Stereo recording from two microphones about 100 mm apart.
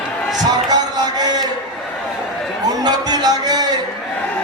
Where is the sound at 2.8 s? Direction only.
45° right (ahead or behind).